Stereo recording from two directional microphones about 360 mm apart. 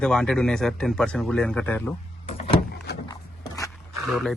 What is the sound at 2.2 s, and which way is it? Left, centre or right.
Vehicle, centre.